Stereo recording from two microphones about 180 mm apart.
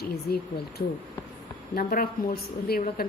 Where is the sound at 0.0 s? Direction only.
60° left (ahead or behind).